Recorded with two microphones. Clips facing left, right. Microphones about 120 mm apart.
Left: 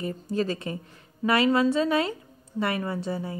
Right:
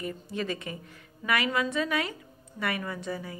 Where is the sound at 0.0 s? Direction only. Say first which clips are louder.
Left 6 dB; 35° left (ahead or behind).